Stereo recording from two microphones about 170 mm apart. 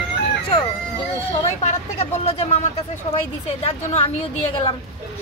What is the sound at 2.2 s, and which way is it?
Speech, 35° left (ahead or behind).